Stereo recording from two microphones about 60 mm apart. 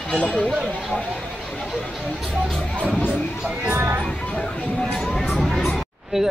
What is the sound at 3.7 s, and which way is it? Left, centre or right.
Speech, right.